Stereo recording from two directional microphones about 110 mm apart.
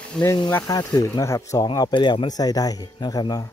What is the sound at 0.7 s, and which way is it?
Speech, 35° left (ahead or behind).